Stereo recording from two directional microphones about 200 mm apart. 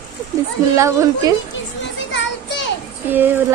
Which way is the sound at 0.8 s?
15° right (ahead or behind).